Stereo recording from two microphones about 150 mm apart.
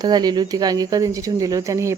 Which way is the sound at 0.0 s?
25° right (ahead or behind).